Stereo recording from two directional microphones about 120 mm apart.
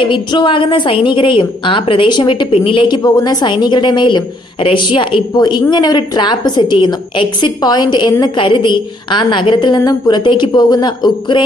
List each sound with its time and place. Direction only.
0.0 s a woman's voice: 45° left (ahead or behind)
3.0 s a woman's voice: 30° left (ahead or behind)